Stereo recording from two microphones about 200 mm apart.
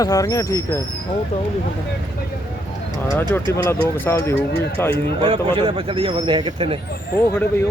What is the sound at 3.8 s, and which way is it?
Speech, 10° left (ahead or behind).